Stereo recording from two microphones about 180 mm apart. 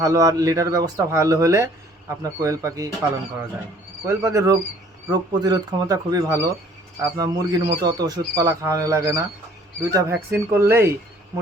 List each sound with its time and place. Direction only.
0.0 s speech: 20° right (ahead or behind)
4.0 s speech: 15° right (ahead or behind)